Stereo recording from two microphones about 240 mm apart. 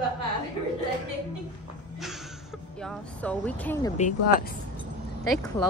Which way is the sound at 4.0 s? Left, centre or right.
Left.